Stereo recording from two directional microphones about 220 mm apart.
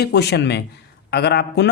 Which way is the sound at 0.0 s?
50° left (ahead or behind).